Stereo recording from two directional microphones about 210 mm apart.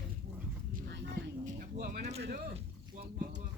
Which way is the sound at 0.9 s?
55° right (ahead or behind).